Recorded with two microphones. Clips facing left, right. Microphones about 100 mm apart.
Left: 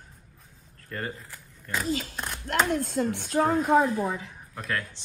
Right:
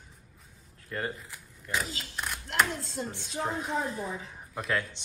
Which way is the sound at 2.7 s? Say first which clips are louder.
Left 10 dB; 60° left (ahead or behind).